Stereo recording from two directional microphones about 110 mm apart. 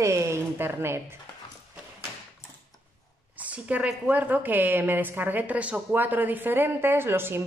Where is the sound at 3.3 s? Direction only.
10° right (ahead or behind).